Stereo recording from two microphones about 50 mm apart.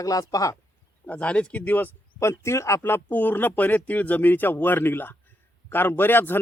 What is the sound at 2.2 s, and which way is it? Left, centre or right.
Speech, left.